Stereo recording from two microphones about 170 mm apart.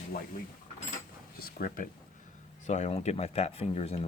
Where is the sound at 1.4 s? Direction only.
60° left (ahead or behind).